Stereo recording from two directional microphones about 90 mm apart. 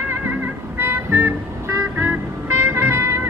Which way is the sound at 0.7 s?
25° right (ahead or behind).